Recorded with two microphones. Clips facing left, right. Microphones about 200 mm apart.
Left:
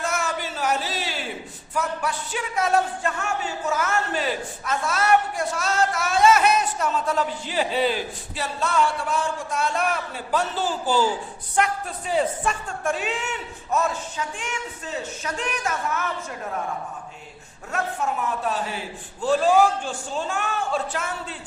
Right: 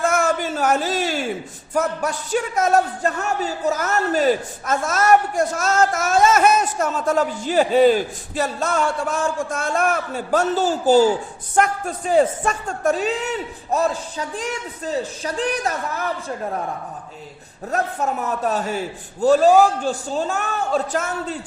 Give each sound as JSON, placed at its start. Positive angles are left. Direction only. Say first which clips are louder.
{"t": 0.0, "sound": "a sound", "louder": "right 8 dB", "side_deg": -50}
{"t": 1.7, "sound": "a man's voice", "louder": "right 5 dB", "side_deg": -45}
{"t": 17.7, "sound": "a man's voice", "louder": "right 4 dB", "side_deg": -40}